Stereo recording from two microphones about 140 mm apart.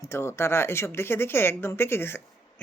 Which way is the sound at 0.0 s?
20° left (ahead or behind).